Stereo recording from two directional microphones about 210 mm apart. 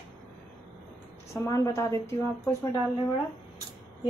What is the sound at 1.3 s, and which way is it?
Speech, 15° left (ahead or behind).